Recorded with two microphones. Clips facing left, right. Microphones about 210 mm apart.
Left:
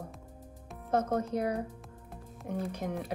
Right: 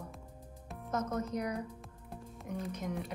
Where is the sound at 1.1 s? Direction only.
30° left (ahead or behind).